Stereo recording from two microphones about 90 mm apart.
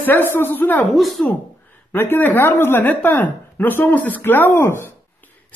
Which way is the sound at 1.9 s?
25° left (ahead or behind).